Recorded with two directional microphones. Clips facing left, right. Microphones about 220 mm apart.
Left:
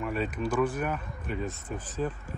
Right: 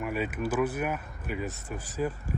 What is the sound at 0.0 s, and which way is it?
Speech, 5° right (ahead or behind).